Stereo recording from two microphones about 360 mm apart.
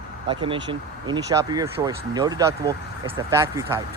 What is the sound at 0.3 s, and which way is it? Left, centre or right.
Speech, centre.